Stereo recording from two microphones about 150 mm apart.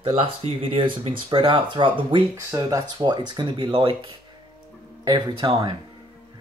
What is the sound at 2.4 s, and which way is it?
Speech, 20° right (ahead or behind).